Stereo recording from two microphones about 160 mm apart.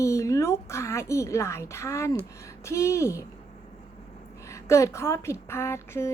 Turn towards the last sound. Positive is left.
turn(degrees=15)  # may be behind; listen again after turning